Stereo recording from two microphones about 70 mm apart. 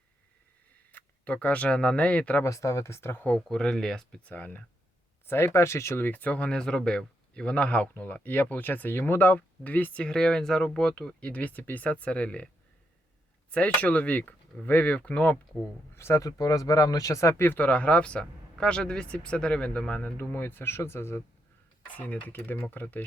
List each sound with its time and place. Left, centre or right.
0.9 s speech: left
2.4 s speech: left
3.2 s speech: centre
5.2 s speech: left; by 12.5 s centre
13.5 s speech: centre
16.0 s speech: left
16.2 s speech: left
17.4 s speech: left
21.8 s speech: left